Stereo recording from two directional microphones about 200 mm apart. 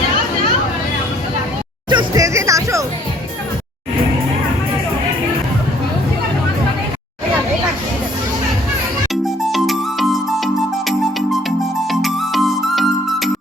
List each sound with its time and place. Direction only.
1.9 s music: 20° right (ahead or behind)
9.2 s music: centre (ahead or behind)